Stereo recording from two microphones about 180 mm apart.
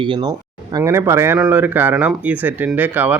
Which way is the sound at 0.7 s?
15° right (ahead or behind).